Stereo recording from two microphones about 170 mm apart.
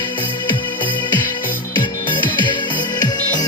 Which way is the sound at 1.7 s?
30° left (ahead or behind).